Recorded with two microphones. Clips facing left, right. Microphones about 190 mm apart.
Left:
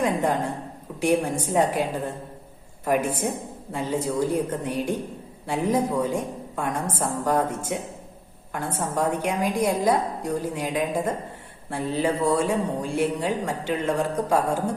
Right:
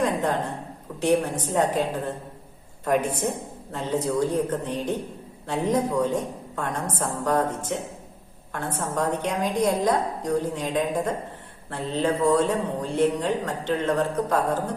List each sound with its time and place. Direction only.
0.0 s a sound: 10° left (ahead or behind)
0.9 s speech: 10° left (ahead or behind)
9.0 s speech: 10° left (ahead or behind)